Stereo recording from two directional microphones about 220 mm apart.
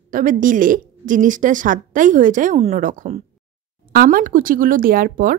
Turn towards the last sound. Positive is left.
turn(degrees=-40)  # may be behind; listen again after turning